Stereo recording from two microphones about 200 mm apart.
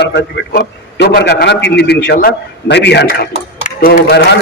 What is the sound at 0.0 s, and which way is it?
A man's voice, 60° left (ahead or behind).